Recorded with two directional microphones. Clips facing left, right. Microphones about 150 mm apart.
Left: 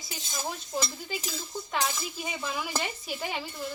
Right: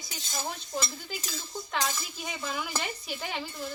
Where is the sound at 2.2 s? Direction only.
5° left (ahead or behind).